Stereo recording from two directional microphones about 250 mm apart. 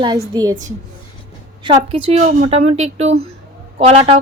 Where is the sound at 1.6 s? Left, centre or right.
Right.